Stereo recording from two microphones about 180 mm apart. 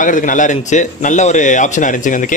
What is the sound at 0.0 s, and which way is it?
A man's voice, 45° left (ahead or behind).